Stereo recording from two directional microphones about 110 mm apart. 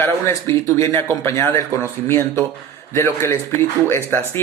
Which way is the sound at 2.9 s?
25° left (ahead or behind).